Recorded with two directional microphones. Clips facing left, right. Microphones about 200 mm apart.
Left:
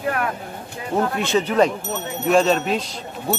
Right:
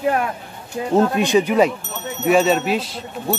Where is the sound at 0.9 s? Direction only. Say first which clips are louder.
Right 5 dB; 15° right (ahead or behind).